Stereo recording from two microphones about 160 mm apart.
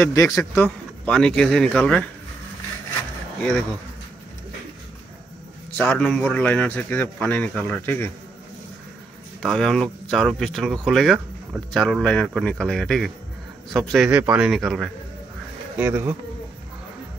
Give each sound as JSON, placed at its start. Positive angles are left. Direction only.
{"t": 0.0, "sound": "a man's voice", "side_deg": 20}
{"t": 0.6, "sound": "speech", "side_deg": 5}
{"t": 3.3, "sound": "speech", "side_deg": 5}
{"t": 5.8, "sound": "a man's voice", "side_deg": 5}
{"t": 9.4, "sound": "speech", "side_deg": 5}